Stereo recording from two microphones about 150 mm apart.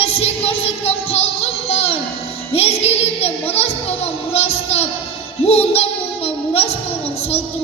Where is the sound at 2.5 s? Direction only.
40° left (ahead or behind).